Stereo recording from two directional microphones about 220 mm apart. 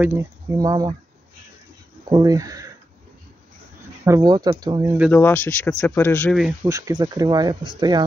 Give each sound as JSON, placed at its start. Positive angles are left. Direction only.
{"t": 0.0, "sound": "speech", "side_deg": -15}
{"t": 2.0, "sound": "speech", "side_deg": -15}
{"t": 4.0, "sound": "speech", "side_deg": -15}
{"t": 5.1, "sound": "speech", "side_deg": 10}
{"t": 6.6, "sound": "speech", "side_deg": -20}